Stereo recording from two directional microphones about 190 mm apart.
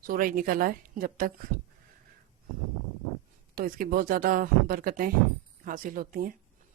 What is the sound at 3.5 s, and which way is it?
Speech, 50° right (ahead or behind).